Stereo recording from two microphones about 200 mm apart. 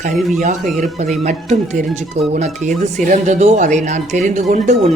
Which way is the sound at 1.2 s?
35° right (ahead or behind).